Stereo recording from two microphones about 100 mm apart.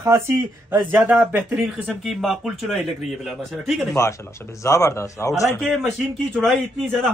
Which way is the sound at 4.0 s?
30° left (ahead or behind).